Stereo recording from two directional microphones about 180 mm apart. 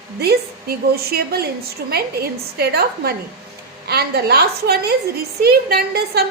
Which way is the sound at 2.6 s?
60° right (ahead or behind).